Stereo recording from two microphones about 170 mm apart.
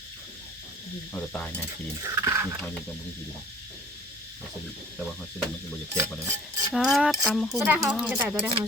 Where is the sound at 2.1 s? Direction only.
15° right (ahead or behind).